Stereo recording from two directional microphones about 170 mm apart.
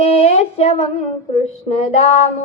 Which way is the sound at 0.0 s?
35° left (ahead or behind).